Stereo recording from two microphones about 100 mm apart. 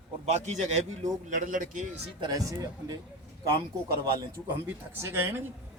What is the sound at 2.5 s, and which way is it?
Speech, 35° right (ahead or behind).